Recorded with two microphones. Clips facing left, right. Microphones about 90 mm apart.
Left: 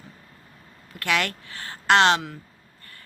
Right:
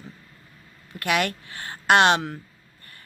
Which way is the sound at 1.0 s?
15° right (ahead or behind).